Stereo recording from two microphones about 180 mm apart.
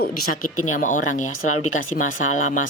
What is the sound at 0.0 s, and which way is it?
Speech, 50° left (ahead or behind).